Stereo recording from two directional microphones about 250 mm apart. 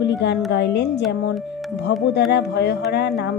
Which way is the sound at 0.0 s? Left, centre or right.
Left.